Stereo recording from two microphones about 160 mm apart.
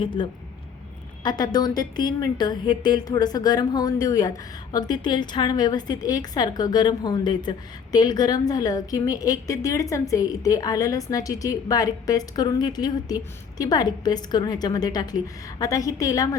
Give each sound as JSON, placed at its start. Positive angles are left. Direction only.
{"t": 0.0, "sound": "a woman's voice", "side_deg": 30}